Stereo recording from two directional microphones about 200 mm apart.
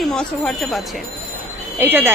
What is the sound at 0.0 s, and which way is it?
Speech, 5° left (ahead or behind).